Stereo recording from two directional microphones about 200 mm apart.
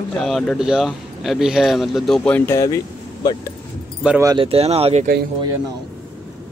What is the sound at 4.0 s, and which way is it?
Speech, 5° right (ahead or behind).